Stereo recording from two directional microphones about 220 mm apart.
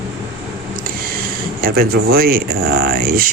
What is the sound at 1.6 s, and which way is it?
Speech, 45° right (ahead or behind).